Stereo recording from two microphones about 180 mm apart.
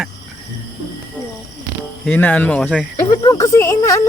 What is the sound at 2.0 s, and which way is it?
Speech, 10° left (ahead or behind).